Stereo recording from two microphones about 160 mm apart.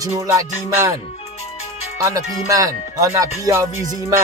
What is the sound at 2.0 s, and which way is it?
Speech, 20° right (ahead or behind).